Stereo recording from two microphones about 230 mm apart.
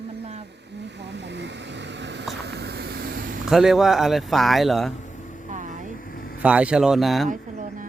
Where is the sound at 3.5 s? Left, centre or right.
Centre.